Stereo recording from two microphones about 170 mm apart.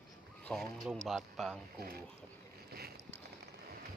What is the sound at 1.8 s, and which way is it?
Speech, 65° right (ahead or behind).